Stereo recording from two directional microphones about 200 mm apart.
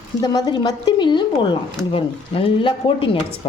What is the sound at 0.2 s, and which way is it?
Speech, 20° left (ahead or behind).